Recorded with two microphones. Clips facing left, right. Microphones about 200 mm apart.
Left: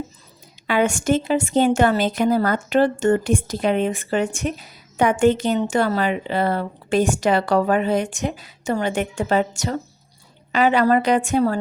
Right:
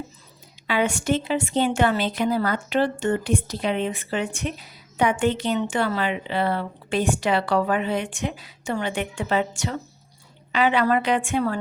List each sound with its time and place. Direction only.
0.7 s a woman's voice: 45° left (ahead or behind)